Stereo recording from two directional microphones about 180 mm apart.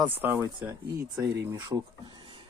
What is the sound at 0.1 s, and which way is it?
Speech, 10° right (ahead or behind).